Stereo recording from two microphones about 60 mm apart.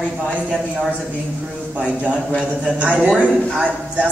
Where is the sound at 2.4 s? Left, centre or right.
Centre.